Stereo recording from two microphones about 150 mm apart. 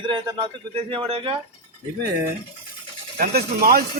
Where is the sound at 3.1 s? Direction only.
80° right.